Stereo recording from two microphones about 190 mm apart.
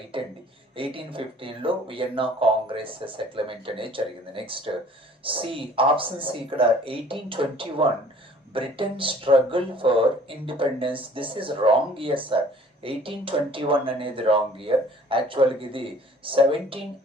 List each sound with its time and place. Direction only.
0.1 s speech: 30° right (ahead or behind)